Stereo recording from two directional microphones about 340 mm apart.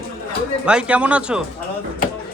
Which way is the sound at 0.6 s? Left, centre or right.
Centre.